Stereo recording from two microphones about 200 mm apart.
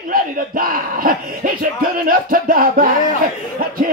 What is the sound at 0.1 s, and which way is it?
Music, 45° right (ahead or behind).